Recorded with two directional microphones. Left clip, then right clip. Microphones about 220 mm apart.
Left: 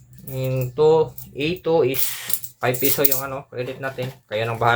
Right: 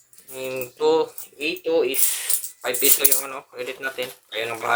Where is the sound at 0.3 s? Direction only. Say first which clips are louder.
Left 6 dB; 20° right (ahead or behind).